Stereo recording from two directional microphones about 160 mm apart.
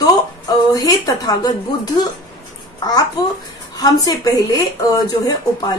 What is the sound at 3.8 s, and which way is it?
Speech, 20° left (ahead or behind).